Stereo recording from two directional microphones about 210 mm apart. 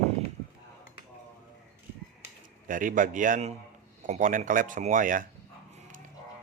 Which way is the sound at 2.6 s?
40° right (ahead or behind).